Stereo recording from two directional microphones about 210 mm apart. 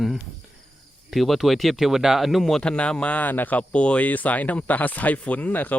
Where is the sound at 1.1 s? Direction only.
Centre (ahead or behind).